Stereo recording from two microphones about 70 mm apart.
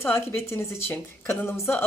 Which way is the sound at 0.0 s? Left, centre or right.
Left.